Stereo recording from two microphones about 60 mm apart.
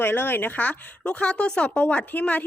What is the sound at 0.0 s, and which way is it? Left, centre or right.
Speech, left.